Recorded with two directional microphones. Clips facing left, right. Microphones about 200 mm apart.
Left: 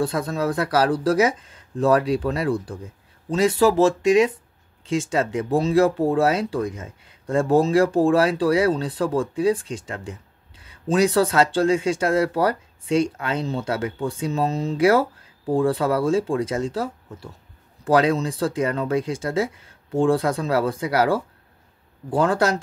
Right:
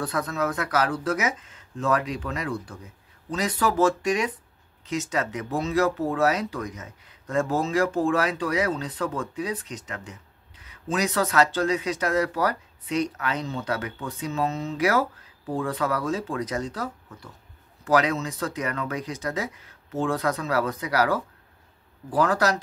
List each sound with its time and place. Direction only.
0.0 s speech: 30° left (ahead or behind)